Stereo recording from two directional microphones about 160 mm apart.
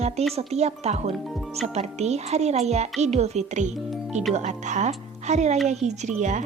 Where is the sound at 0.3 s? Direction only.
40° right (ahead or behind).